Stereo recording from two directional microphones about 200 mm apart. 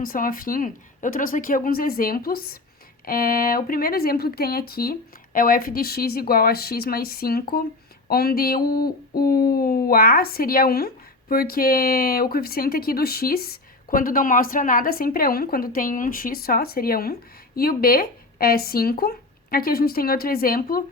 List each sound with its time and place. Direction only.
0.0 s speech: 45° left (ahead or behind)